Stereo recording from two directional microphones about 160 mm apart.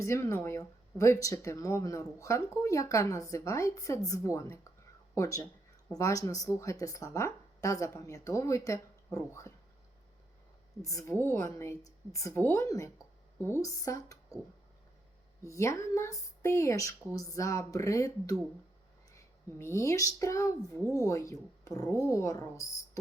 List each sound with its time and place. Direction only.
0.0 s a woman's voice: 20° left (ahead or behind)
10.8 s a woman's voice: 20° left (ahead or behind)
15.4 s speech: 20° left (ahead or behind)